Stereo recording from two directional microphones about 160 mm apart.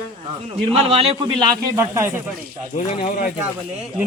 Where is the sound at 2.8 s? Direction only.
45° left (ahead or behind).